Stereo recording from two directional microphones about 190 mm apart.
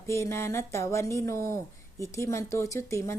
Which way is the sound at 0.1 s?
15° left (ahead or behind).